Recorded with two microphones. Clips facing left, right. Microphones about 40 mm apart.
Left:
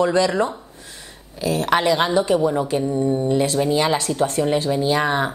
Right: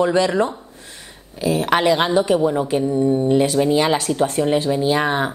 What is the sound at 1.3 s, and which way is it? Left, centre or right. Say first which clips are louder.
Speech: right 1 dB; right.